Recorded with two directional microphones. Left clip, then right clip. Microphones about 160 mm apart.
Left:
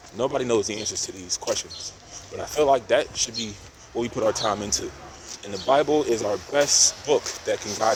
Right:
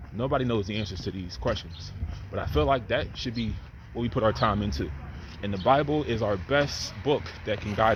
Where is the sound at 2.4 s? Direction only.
45° left (ahead or behind).